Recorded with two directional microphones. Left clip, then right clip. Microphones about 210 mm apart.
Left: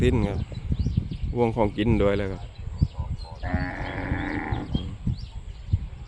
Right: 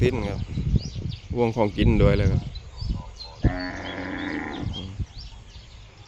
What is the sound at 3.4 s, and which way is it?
Sheep, 45° right (ahead or behind).